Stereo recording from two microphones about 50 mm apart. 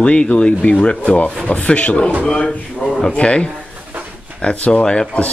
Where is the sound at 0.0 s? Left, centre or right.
Left.